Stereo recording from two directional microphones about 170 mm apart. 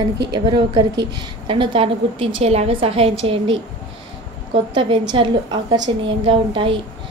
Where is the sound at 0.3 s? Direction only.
25° right (ahead or behind).